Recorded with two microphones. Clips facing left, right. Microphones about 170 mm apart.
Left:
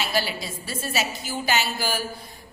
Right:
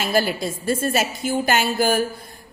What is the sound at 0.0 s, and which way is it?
Speech, 50° right (ahead or behind).